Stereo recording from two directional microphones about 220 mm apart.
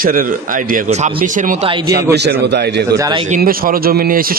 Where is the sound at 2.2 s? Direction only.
50° right (ahead or behind).